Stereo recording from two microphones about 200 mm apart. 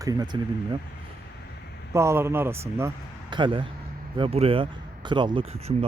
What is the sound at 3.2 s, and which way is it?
Speech, 25° right (ahead or behind).